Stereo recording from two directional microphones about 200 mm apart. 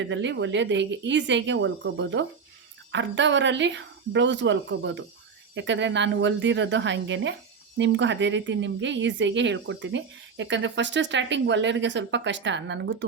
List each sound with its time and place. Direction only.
0.0 s speech: 65° right (ahead or behind)